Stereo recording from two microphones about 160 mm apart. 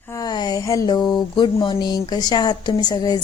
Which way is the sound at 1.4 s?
30° left (ahead or behind).